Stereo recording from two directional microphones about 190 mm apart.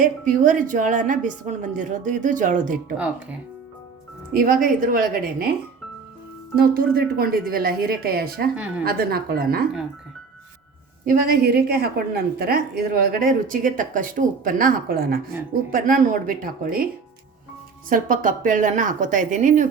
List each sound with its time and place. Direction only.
0.0 s a woman's voice: 45° right (ahead or behind)
4.4 s a woman's voice: 45° right (ahead or behind)
6.6 s a woman's voice: 50° right (ahead or behind)
11.0 s a woman's voice: 50° right (ahead or behind)
17.8 s a woman's voice: 45° right (ahead or behind)